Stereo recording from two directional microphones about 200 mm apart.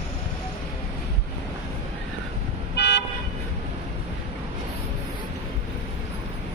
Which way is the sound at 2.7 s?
60° left (ahead or behind).